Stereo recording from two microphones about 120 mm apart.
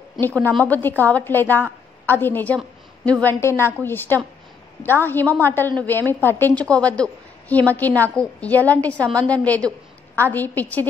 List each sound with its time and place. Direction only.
0.2 s a woman's voice: 15° left (ahead or behind)